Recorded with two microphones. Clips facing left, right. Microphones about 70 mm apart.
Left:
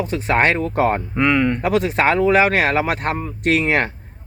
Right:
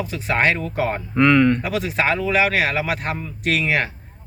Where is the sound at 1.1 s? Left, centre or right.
Centre.